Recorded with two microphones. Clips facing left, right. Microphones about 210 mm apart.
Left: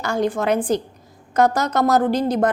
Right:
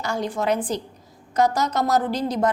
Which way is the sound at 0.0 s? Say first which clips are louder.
Left 4 dB; 55° left (ahead or behind).